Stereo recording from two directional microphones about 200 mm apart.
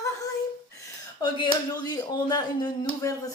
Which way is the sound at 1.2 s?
20° left (ahead or behind).